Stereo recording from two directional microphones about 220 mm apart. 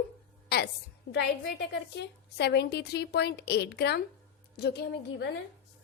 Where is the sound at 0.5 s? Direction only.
45° left (ahead or behind).